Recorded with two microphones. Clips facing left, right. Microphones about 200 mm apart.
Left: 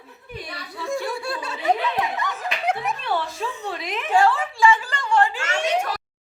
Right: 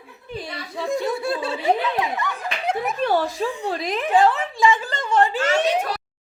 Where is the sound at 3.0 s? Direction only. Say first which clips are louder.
Right 5 dB; 40° right (ahead or behind).